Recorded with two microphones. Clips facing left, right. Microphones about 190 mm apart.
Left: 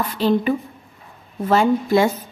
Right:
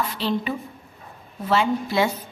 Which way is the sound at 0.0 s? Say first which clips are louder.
Left 6 dB; 50° left (ahead or behind).